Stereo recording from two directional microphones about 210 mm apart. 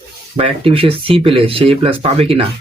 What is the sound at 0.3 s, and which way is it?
Speech, 25° right (ahead or behind).